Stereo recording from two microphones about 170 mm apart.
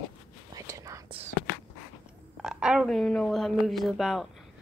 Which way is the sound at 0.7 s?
20° right (ahead or behind).